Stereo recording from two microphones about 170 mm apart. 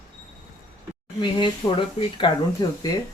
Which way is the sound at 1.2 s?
30° left (ahead or behind).